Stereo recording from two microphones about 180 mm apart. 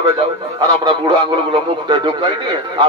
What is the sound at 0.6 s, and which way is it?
Speech, 20° right (ahead or behind).